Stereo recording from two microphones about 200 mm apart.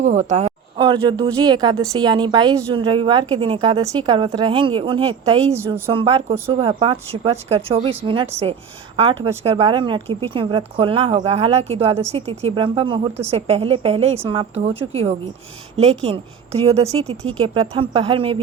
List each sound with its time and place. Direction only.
0.0 s speech: 35° right (ahead or behind)
5.5 s a woman's voice: 10° right (ahead or behind)
5.9 s a woman's voice: 25° right (ahead or behind)